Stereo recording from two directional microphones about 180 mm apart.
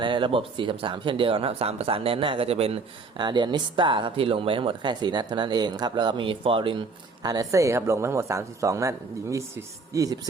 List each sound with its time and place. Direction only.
0.0 s speech: 25° right (ahead or behind)